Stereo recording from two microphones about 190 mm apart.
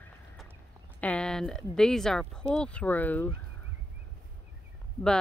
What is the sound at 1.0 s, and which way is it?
Speech, 5° left (ahead or behind).